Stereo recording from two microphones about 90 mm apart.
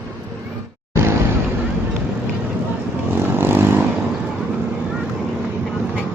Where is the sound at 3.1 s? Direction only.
25° right (ahead or behind).